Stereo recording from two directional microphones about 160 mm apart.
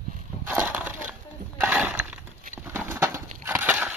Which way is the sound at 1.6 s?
5° right (ahead or behind).